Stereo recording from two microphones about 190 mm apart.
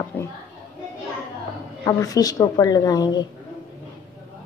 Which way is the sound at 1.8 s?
20° left (ahead or behind).